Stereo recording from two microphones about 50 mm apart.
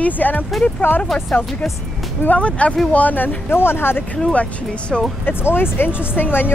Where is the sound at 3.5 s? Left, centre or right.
Left.